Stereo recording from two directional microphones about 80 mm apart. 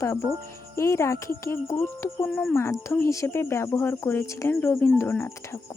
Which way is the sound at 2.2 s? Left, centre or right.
Centre.